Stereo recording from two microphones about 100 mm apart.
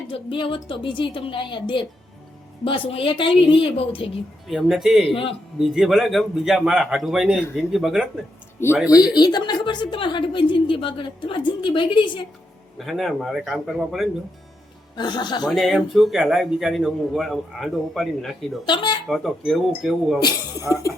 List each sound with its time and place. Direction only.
0.1 s a woman's voice: 65° left (ahead or behind)
4.4 s a man's voice: centre (ahead or behind)
5.0 s a man's voice: 65° left (ahead or behind)
5.5 s a man's voice: centre (ahead or behind)
8.9 s a woman's voice: 40° left (ahead or behind)
12.8 s a man's voice: centre (ahead or behind)
14.9 s a woman's voice: 45° left (ahead or behind)
15.4 s a man's voice: centre (ahead or behind)
18.6 s a woman's voice: 50° left (ahead or behind)
19.0 s a man's voice: centre (ahead or behind)
20.2 s speech: 35° left (ahead or behind)